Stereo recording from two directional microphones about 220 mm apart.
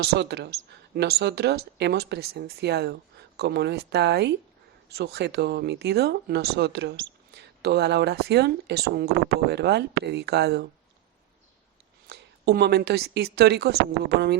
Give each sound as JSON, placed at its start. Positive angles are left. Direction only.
{"t": 0.0, "sound": "speech", "side_deg": -50}
{"t": 12.0, "sound": "speech", "side_deg": -50}